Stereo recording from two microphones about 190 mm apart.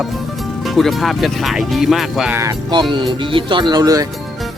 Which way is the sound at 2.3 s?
15° right (ahead or behind).